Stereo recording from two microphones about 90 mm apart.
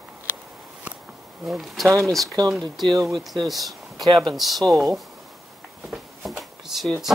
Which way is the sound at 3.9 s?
45° right (ahead or behind).